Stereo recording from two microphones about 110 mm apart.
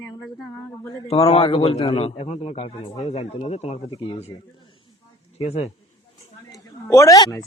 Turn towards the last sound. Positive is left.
turn(degrees=30)  # may be behind; listen again after turning